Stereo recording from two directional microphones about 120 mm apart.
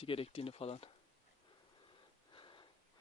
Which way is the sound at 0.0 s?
50° left (ahead or behind).